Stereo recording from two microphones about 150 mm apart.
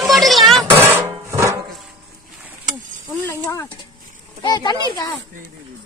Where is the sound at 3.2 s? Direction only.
20° left (ahead or behind).